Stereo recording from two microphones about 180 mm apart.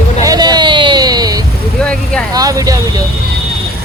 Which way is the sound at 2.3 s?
20° right (ahead or behind).